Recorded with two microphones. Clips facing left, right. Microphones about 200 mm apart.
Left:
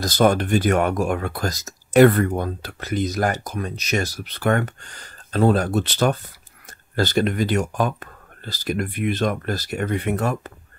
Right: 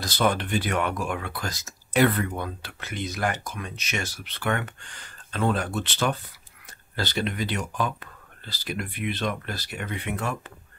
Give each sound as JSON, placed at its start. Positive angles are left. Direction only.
{"t": 0.0, "sound": "speech", "side_deg": 45}